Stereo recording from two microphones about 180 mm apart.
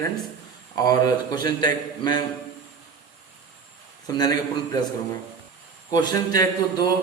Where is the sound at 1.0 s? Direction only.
20° left (ahead or behind).